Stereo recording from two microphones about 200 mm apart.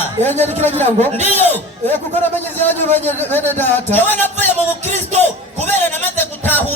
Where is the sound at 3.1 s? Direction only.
10° left (ahead or behind).